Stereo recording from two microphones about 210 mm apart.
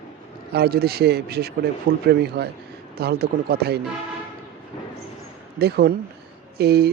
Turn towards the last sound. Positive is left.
turn(degrees=-50)  # may be behind; listen again after turning